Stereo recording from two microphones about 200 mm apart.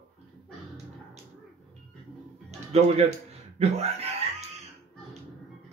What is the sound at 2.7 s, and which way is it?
Speech, 35° right (ahead or behind).